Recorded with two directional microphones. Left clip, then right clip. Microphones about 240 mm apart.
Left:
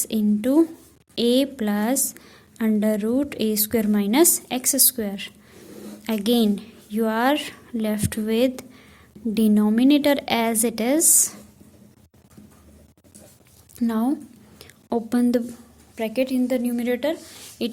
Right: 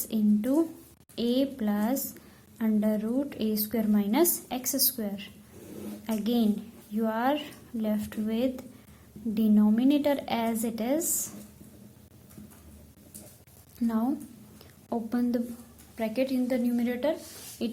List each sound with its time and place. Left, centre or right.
0.1 s a woman's voice: left
13.7 s a woman's voice: left